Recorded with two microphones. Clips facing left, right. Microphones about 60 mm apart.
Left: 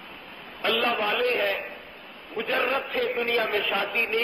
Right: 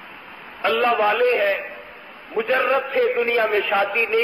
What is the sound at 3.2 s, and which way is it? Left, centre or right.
A man's voice, right.